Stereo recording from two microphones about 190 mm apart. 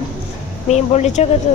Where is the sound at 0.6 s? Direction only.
35° left (ahead or behind).